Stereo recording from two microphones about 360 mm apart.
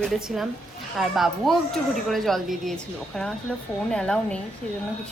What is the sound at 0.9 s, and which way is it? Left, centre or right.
A woman's voice, centre.